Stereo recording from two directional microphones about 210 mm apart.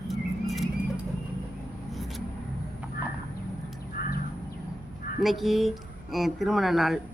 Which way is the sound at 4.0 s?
45° left (ahead or behind).